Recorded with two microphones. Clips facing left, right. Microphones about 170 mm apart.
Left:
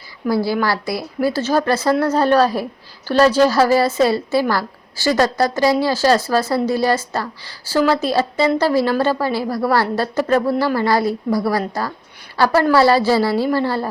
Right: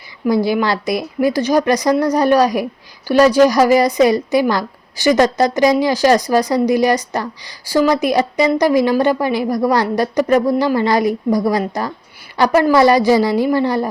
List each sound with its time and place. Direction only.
0.3 s a woman's voice: 20° right (ahead or behind)